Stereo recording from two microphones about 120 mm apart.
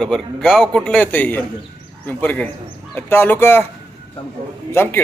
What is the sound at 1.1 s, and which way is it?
Speech, 15° left (ahead or behind).